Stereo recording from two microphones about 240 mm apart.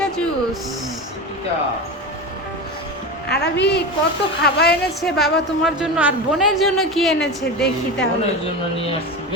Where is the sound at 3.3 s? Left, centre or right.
Left.